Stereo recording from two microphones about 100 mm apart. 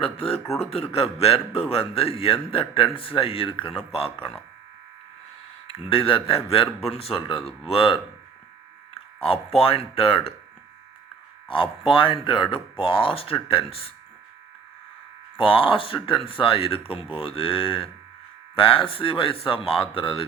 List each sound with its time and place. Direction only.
0.0 s a man's voice: 70° left (ahead or behind)
0.6 s a man's voice: 85° left
5.7 s a man's voice: 70° left (ahead or behind)
6.7 s a man's voice: 90° left; by 7.9 s 70° left (ahead or behind)
9.2 s a man's voice: 75° left (ahead or behind)
11.4 s speech: 60° left (ahead or behind)
15.4 s speech: 60° left (ahead or behind)